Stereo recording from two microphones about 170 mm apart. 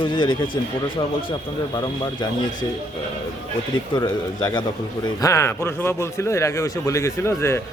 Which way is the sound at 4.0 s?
25° left (ahead or behind).